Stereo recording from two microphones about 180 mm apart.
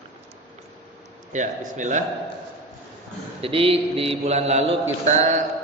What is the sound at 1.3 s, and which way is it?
Speech, 40° right (ahead or behind).